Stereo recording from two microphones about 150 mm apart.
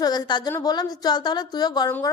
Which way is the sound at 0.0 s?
25° left (ahead or behind).